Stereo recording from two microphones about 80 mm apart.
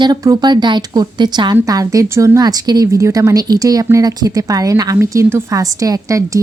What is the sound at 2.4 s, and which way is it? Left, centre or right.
Speech, right.